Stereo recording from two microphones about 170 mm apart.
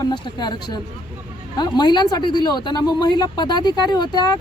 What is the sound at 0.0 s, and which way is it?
Speech, 25° left (ahead or behind).